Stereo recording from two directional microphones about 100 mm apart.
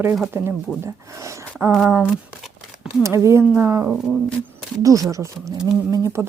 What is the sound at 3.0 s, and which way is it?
Speech, 30° right (ahead or behind).